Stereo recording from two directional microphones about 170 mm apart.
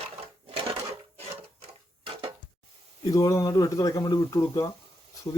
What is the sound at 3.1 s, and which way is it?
Speech, 20° left (ahead or behind).